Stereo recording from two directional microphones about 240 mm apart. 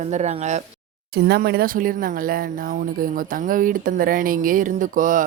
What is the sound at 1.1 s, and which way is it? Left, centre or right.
Speech, right.